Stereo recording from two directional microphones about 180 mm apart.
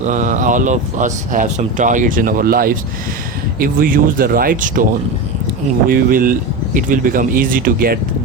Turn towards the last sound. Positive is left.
turn(degrees=-55)  # may be behind; listen again after turning